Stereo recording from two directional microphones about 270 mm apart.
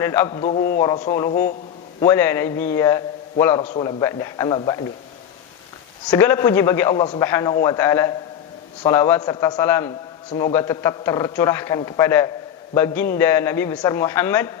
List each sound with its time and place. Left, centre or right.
0.0 s a man's voice: centre
6.1 s a man's voice: centre